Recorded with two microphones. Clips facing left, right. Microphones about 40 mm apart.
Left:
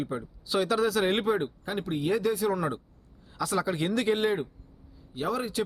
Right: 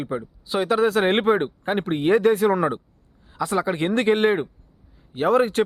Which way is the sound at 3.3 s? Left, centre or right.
Right.